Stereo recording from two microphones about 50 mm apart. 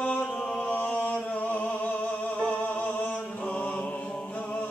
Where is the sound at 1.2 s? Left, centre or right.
Left.